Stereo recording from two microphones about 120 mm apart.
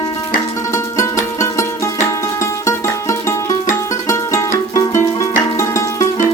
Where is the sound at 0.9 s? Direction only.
25° left (ahead or behind).